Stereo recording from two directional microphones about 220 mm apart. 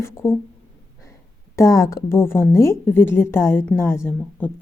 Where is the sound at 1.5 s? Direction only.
15° left (ahead or behind).